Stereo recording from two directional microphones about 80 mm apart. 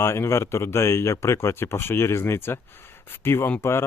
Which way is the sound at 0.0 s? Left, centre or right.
Left.